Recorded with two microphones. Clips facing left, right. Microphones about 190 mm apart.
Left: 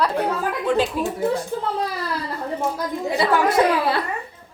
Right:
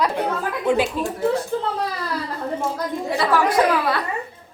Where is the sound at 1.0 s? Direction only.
10° left (ahead or behind).